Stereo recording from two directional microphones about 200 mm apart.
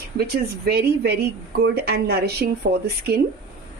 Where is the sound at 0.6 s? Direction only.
55° right (ahead or behind).